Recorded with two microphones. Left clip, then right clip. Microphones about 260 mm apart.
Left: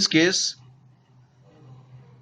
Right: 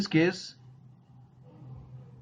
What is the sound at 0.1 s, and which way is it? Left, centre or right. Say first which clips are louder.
Speech: left 6 dB; left.